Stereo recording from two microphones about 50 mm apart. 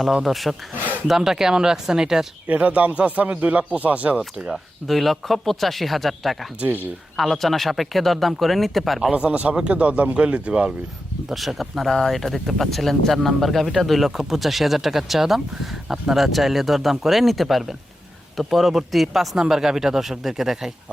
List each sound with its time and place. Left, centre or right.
0.1 s speech: centre
2.5 s speech: right
4.5 s speech: centre
9.1 s speech: right
11.3 s speech: centre